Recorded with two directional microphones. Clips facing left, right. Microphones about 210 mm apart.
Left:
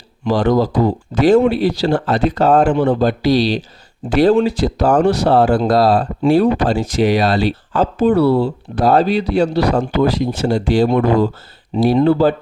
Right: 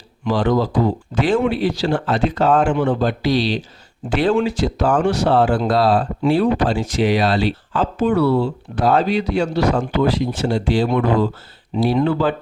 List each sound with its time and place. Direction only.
0.3 s speech: 40° left (ahead or behind)